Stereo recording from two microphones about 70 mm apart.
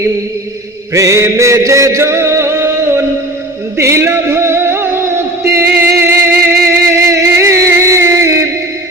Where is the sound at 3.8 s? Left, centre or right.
Right.